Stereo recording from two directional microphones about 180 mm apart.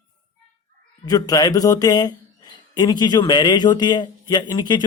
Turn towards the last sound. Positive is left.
turn(degrees=25)  # may be behind; listen again after turning